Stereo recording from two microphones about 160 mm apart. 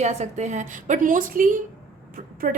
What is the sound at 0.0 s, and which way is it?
A woman's voice, 45° right (ahead or behind).